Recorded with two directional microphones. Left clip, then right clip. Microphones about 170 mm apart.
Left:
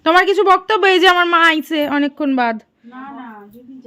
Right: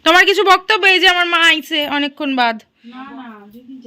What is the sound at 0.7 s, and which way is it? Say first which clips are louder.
A woman's voice: even; 35° left (ahead or behind).